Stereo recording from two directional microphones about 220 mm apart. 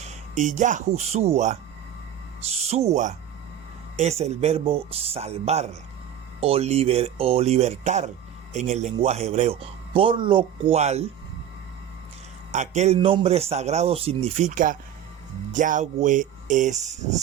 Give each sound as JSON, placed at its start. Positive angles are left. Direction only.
{"t": 0.0, "sound": "speech", "side_deg": -30}
{"t": 12.5, "sound": "speech", "side_deg": -30}